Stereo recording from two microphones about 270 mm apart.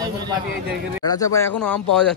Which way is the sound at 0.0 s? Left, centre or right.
Centre.